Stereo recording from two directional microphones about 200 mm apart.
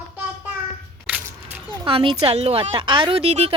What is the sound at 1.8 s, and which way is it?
A woman's voice, 25° right (ahead or behind).